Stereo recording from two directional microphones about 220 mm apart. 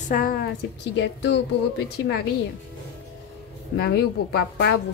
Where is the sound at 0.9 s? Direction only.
55° left (ahead or behind).